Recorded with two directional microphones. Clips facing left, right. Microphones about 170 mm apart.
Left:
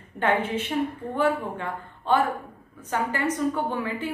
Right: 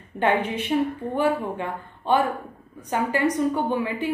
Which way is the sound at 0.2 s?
15° right (ahead or behind).